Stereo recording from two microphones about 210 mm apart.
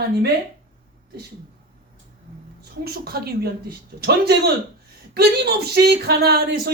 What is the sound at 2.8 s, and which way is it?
A man's voice, 50° right (ahead or behind).